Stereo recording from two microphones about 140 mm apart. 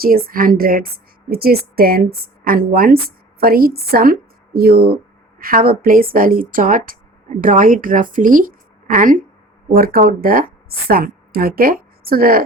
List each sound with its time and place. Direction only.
0.0 s a woman's voice: 90° right
9.7 s a woman's voice: 90° right